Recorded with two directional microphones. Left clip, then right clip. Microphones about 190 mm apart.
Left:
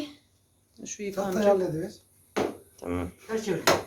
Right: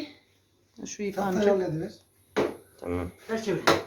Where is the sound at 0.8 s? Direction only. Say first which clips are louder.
Right 1 dB; 35° right (ahead or behind).